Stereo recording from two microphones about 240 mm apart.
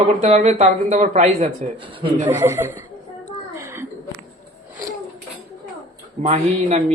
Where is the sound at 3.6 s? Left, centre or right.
Centre.